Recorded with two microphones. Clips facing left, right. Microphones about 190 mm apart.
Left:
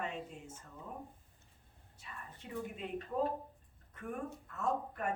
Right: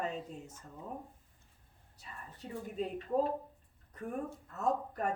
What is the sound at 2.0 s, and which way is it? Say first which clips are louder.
A woman's voice: right 2 dB; 35° right (ahead or behind).